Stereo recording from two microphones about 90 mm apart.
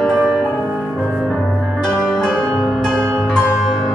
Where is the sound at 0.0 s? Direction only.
5° left (ahead or behind).